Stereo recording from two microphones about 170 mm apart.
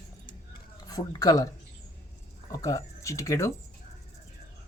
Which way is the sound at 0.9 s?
20° left (ahead or behind).